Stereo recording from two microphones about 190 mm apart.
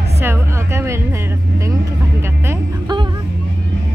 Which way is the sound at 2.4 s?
25° right (ahead or behind).